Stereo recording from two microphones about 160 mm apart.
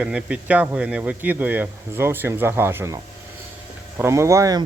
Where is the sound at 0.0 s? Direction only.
5° right (ahead or behind).